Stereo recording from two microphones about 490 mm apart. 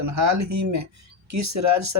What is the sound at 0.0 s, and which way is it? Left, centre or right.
Speech, right.